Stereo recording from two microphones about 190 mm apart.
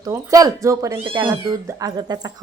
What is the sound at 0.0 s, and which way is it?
Speech, 20° right (ahead or behind).